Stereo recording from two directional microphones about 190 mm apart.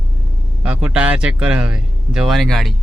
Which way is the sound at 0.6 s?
5° right (ahead or behind).